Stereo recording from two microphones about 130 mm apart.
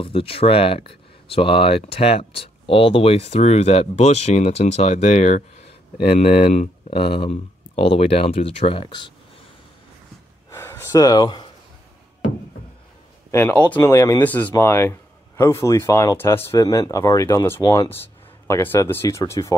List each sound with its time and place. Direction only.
0.0 s speech: 45° left (ahead or behind)
6.0 s speech: 50° left (ahead or behind)
10.5 s a sound: 20° left (ahead or behind)
13.3 s speech: 15° left (ahead or behind)
13.8 s speech: 25° left (ahead or behind)
14.2 s speech: 15° left (ahead or behind)